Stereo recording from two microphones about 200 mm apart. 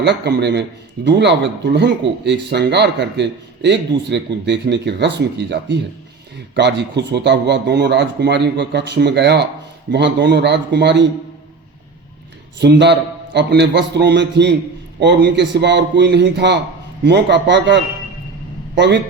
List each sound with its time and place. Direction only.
0.0 s speech: 55° right (ahead or behind)
12.5 s speech: 60° right (ahead or behind)